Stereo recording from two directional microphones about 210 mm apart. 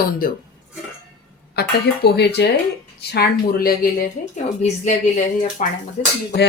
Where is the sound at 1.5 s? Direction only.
50° left (ahead or behind); by 5.7 s 35° left (ahead or behind).